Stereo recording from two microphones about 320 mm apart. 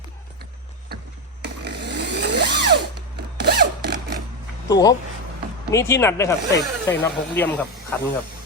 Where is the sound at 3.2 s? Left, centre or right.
Right.